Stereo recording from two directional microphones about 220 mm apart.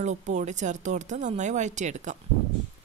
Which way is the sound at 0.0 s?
30° right (ahead or behind).